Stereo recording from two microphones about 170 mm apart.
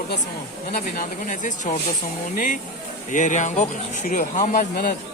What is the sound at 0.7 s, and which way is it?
Speech, 55° left (ahead or behind).